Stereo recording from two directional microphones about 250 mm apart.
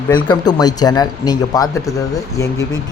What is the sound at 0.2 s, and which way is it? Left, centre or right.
Speech, centre.